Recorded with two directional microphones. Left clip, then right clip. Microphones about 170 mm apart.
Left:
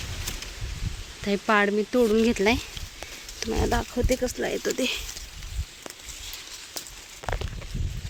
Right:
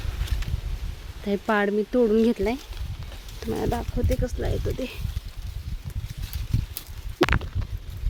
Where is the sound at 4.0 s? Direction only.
20° left (ahead or behind).